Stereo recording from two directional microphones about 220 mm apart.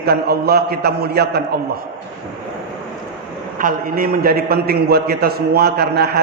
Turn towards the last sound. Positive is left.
turn(degrees=-45)  # may be behind; listen again after turning